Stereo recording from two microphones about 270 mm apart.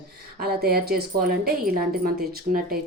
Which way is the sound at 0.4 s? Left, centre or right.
Right.